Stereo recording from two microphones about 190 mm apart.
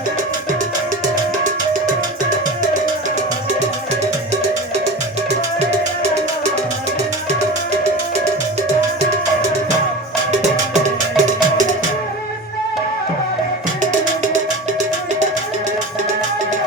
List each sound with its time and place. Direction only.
11.2 s music: 40° right (ahead or behind)